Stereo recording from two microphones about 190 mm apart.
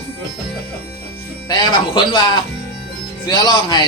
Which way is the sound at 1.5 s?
25° left (ahead or behind).